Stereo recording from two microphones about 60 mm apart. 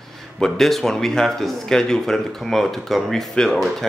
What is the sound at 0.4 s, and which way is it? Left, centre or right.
Speech, centre.